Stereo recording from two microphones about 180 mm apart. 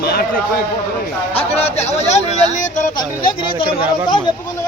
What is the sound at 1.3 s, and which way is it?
Speech, 35° left (ahead or behind).